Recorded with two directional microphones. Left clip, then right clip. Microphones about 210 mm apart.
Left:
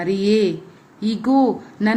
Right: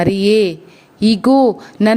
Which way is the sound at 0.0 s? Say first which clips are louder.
Right 5 dB; 45° right (ahead or behind).